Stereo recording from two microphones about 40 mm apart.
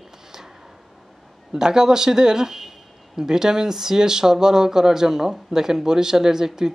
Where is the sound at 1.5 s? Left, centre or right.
Centre.